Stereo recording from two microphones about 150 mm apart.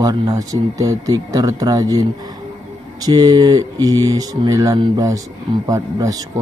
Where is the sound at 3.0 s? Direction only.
25° right (ahead or behind).